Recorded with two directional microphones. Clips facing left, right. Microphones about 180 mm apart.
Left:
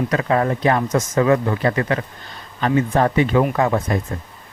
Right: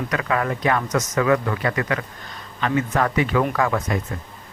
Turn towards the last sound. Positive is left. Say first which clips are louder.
# left 3 dB
turn(degrees=30)  # may be behind; listen again after turning